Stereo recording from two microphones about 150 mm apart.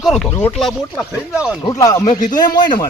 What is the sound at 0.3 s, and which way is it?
Speech, 20° left (ahead or behind).